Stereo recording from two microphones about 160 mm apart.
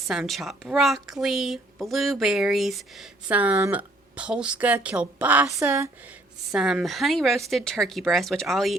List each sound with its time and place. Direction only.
0.1 s a woman's voice: centre (ahead or behind); by 5.9 s 20° right (ahead or behind)
6.5 s a woman's voice: 5° right (ahead or behind)